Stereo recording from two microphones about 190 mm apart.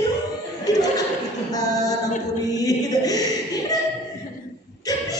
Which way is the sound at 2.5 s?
20° left (ahead or behind).